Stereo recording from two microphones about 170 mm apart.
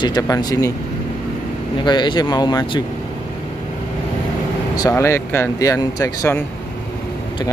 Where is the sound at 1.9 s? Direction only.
25° left (ahead or behind).